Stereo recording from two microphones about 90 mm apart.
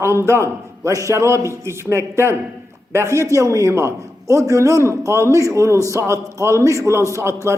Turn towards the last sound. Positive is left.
turn(degrees=-35)  # may be behind; listen again after turning